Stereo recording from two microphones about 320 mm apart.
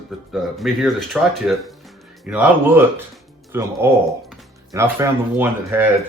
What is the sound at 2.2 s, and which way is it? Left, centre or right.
Speech, centre.